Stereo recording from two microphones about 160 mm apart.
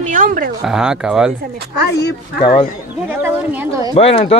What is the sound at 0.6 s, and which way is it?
Speech, 5° right (ahead or behind).